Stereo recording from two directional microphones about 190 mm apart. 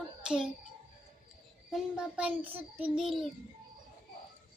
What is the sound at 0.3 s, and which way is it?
Child singing, 5° right (ahead or behind).